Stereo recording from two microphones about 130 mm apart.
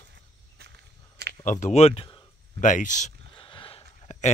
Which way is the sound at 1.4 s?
75° left (ahead or behind).